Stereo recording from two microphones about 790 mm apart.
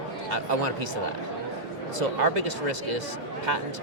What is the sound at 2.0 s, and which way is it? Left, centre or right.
Speech, right.